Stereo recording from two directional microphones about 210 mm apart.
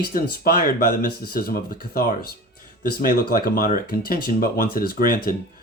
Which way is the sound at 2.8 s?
40° left (ahead or behind).